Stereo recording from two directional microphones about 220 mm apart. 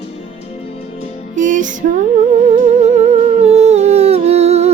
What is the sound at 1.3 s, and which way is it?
Music, 35° right (ahead or behind).